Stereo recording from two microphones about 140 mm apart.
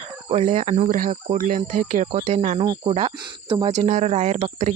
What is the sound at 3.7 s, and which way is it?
Speech, 65° right (ahead or behind).